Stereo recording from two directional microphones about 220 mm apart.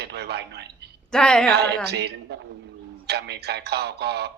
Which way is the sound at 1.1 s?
5° left (ahead or behind).